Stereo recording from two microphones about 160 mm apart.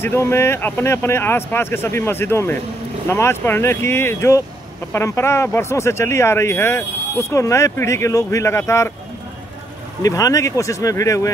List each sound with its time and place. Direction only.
0.0 s speech: 15° left (ahead or behind)
10.0 s speech: 20° left (ahead or behind)